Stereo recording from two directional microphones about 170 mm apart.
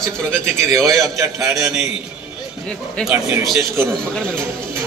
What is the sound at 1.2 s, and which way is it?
Speech, 15° right (ahead or behind).